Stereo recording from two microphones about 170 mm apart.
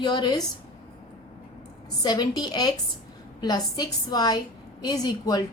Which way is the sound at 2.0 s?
25° left (ahead or behind).